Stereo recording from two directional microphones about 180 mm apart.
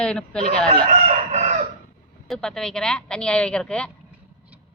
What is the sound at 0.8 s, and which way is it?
Crowing, 40° right (ahead or behind).